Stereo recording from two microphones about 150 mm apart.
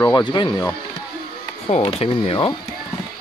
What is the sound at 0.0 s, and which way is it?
Speech, 30° left (ahead or behind).